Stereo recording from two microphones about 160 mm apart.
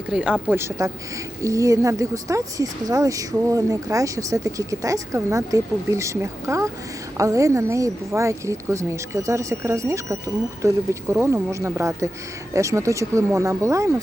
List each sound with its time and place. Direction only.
0.1 s speech: 5° right (ahead or behind)